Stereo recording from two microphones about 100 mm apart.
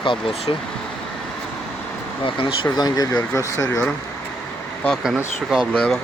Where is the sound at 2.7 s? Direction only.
40° left (ahead or behind).